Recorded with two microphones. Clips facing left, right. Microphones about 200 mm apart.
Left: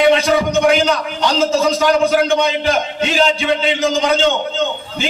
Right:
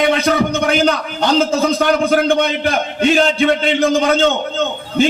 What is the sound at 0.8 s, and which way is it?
A man's voice, 55° right (ahead or behind).